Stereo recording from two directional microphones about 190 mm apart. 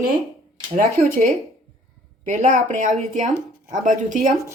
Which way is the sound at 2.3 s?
45° right (ahead or behind).